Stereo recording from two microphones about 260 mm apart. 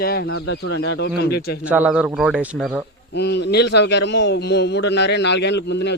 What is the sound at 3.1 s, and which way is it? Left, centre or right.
A man's voice, left.